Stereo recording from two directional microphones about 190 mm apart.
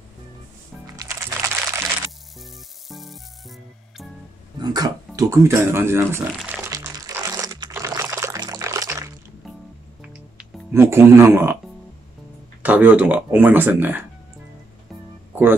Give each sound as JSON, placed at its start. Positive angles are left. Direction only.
{"t": 0.9, "sound": "music", "side_deg": -15}
{"t": 2.3, "sound": "music", "side_deg": 0}
{"t": 4.6, "sound": "a sound", "side_deg": -20}
{"t": 10.3, "sound": "speech", "side_deg": -15}
{"t": 12.6, "sound": "speech", "side_deg": -10}